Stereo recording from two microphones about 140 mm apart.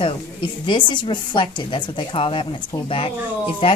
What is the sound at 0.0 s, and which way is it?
A woman's voice, 35° left (ahead or behind).